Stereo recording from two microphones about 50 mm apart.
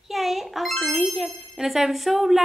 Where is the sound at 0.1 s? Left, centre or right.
Centre.